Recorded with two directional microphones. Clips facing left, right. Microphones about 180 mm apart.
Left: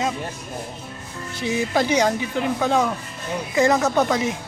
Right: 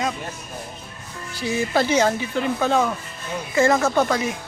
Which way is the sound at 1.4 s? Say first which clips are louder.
Even; 15° left (ahead or behind).